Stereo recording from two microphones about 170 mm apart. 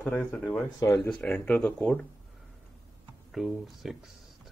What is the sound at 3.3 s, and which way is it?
Speech, centre (ahead or behind).